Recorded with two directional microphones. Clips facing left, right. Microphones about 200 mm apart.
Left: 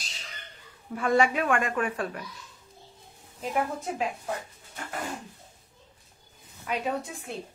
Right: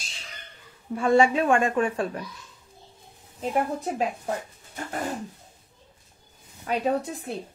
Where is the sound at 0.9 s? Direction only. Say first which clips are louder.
Right 4 dB; 25° right (ahead or behind).